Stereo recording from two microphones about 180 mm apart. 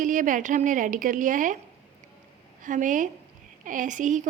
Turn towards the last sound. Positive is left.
turn(degrees=-45)  # may be behind; listen again after turning